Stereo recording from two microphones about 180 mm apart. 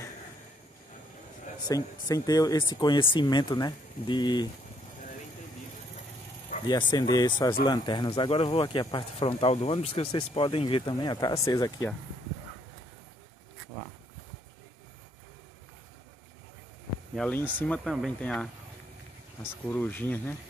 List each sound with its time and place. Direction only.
1.7 s speech: 20° left (ahead or behind)
6.7 s speech: 25° left (ahead or behind)
17.1 s speech: 5° left (ahead or behind)